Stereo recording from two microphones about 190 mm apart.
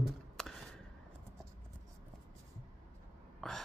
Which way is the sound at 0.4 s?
Centre (ahead or behind).